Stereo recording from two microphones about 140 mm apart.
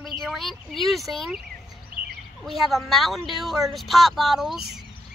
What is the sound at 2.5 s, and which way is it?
A child's voice, centre (ahead or behind).